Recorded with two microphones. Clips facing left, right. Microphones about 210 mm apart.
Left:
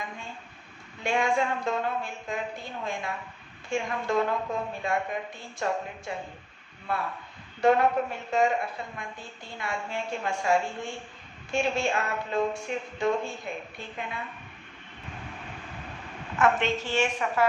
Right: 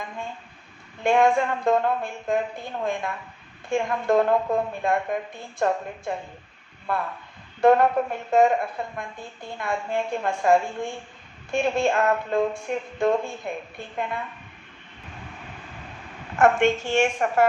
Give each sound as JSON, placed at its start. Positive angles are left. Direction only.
{"t": 1.0, "sound": "a woman's voice", "side_deg": -55}
{"t": 16.4, "sound": "a woman's voice", "side_deg": -50}